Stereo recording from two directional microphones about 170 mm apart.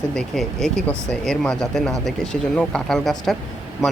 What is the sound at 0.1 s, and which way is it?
Speech, 5° left (ahead or behind).